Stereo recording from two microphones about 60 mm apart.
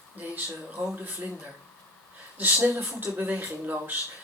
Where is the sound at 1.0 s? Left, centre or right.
Right.